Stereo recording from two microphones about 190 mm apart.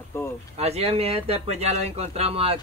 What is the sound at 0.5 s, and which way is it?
Speech, 35° right (ahead or behind).